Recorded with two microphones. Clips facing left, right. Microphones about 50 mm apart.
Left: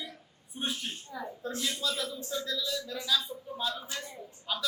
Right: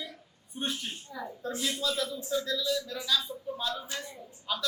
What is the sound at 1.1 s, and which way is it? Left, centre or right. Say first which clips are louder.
Speech: even; centre.